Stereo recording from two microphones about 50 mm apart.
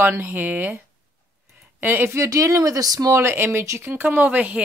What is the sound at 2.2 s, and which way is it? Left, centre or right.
Speech, right.